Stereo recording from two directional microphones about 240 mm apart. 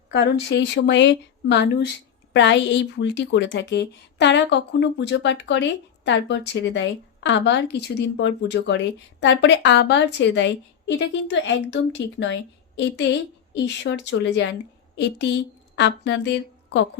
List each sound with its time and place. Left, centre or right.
0.1 s a woman's voice: left